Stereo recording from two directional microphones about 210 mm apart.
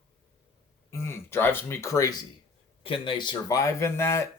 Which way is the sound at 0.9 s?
10° left (ahead or behind).